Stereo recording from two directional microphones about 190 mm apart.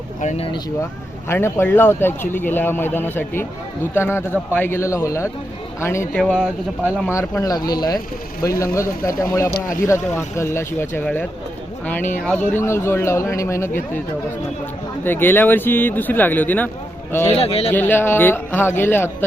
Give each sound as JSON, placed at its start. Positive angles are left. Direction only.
{"t": 0.2, "sound": "speech", "side_deg": 35}
{"t": 1.3, "sound": "speech", "side_deg": 10}
{"t": 6.3, "sound": "speech", "side_deg": -5}
{"t": 7.1, "sound": "speech", "side_deg": 15}
{"t": 12.5, "sound": "speech", "side_deg": 10}
{"t": 15.0, "sound": "speech", "side_deg": 10}
{"t": 17.3, "sound": "speech", "side_deg": 30}
{"t": 17.7, "sound": "speech", "side_deg": 10}